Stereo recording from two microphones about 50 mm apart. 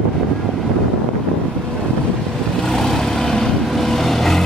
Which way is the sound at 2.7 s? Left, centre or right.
Centre.